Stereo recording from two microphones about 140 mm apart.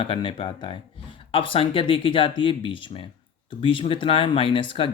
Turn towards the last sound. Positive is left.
turn(degrees=35)  # may be behind; listen again after turning